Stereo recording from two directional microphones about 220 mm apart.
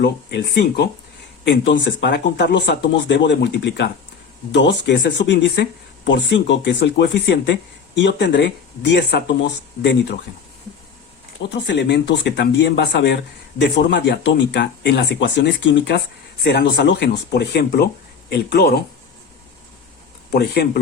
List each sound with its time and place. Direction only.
0.0 s speech: 50° left (ahead or behind)
11.4 s speech: 50° left (ahead or behind)
20.3 s speech: 45° left (ahead or behind)